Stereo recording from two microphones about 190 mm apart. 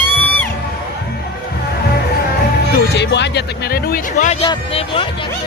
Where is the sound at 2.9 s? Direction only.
65° left (ahead or behind); by 5.0 s 30° left (ahead or behind).